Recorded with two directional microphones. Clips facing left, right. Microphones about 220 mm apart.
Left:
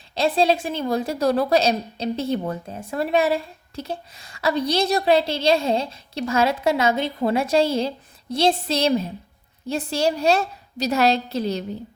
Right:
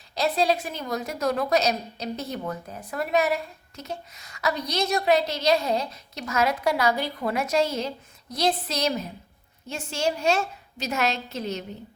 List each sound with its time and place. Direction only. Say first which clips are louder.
0.1 s a woman's voice: left 4 dB; 30° left (ahead or behind)